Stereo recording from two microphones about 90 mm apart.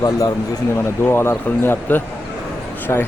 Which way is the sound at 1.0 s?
25° left (ahead or behind).